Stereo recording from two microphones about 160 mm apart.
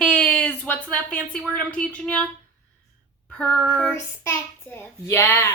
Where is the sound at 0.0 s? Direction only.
5° left (ahead or behind).